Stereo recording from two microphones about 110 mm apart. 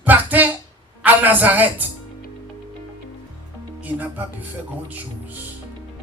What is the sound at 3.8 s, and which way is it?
Speech, 15° right (ahead or behind).